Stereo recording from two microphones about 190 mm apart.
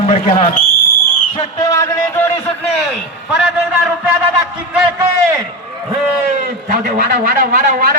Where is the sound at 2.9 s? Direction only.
5° right (ahead or behind).